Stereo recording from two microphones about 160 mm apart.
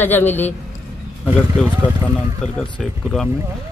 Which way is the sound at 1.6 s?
5° left (ahead or behind).